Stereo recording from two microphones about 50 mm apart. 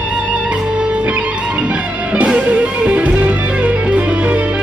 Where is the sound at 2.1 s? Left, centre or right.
Right.